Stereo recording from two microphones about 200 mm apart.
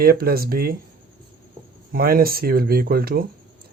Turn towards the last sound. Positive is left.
turn(degrees=-50)  # may be behind; listen again after turning